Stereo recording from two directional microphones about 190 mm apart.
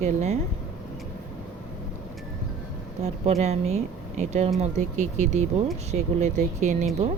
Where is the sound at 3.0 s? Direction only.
35° right (ahead or behind).